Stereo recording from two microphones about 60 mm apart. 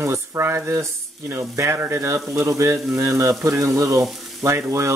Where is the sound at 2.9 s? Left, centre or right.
Right.